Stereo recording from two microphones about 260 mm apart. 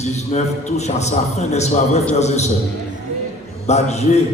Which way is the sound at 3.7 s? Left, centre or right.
Left.